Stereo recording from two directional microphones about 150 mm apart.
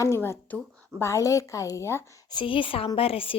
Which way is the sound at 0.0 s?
20° left (ahead or behind).